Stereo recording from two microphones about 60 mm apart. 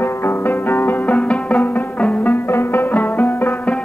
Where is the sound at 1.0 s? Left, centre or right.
Left.